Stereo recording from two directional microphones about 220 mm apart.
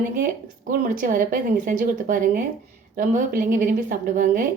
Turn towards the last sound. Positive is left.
turn(degrees=-35)  # may be behind; listen again after turning